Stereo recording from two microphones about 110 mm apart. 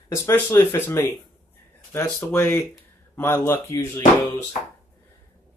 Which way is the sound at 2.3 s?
20° left (ahead or behind).